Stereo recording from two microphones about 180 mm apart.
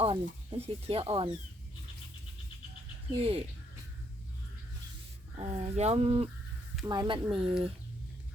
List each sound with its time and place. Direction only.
0.6 s speech: 30° right (ahead or behind)
3.1 s speech: 35° right (ahead or behind)
5.4 s speech: 35° right (ahead or behind)
6.8 s speech: 20° right (ahead or behind)